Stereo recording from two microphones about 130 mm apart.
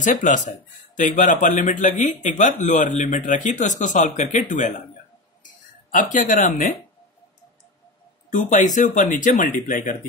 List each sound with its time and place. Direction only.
0.0 s speech: 75° left (ahead or behind)
5.4 s a sound: 85° left
8.3 s speech: 80° left